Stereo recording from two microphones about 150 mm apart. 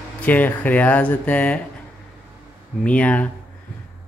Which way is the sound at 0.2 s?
10° left (ahead or behind).